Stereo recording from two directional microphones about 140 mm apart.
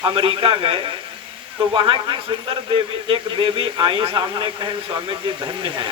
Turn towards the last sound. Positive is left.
turn(degrees=-35)  # may be behind; listen again after turning